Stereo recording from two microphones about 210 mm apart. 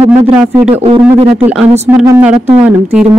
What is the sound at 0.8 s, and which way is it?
Speech, 25° right (ahead or behind).